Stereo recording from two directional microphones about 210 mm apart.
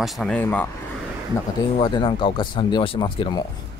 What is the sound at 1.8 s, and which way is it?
Speech, 25° left (ahead or behind).